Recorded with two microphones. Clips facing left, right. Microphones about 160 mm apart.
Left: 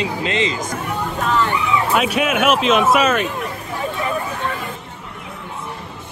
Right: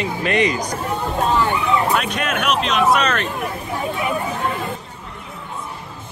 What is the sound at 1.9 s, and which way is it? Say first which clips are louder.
Speech: left 3 dB; 5° left (ahead or behind).